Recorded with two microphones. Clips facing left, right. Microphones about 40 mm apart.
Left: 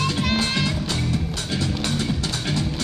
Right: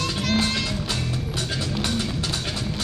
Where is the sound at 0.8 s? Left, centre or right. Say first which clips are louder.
Left 3 dB; centre.